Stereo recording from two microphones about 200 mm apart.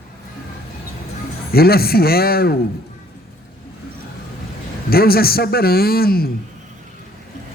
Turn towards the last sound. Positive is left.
turn(degrees=50)  # may be behind; listen again after turning